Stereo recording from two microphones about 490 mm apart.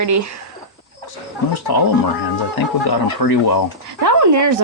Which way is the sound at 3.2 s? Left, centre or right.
Left.